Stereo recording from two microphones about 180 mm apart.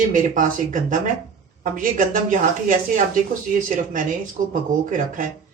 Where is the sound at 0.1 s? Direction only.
45° right (ahead or behind).